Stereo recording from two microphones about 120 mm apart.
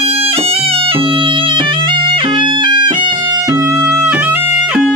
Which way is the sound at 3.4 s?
25° right (ahead or behind).